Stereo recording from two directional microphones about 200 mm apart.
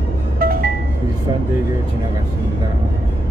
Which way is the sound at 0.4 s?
45° right (ahead or behind).